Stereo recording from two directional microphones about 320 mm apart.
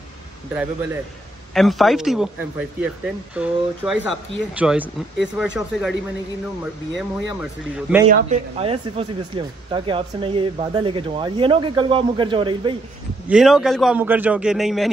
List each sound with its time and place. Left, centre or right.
1.5 s speech: centre
3.3 s speech: centre
8.1 s speech: centre
13.3 s speech: centre